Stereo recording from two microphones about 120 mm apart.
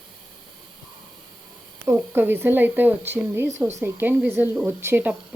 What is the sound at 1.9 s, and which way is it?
Speech, 15° right (ahead or behind).